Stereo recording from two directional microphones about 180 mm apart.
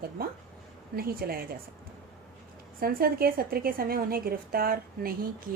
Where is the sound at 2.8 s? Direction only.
55° right (ahead or behind).